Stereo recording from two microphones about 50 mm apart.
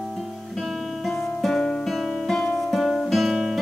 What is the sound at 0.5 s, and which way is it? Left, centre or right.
Guitar, centre.